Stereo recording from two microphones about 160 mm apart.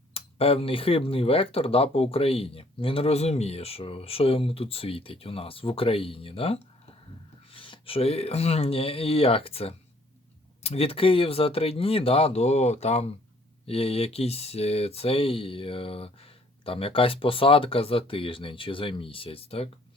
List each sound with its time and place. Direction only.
0.1 s speech: 35° left (ahead or behind)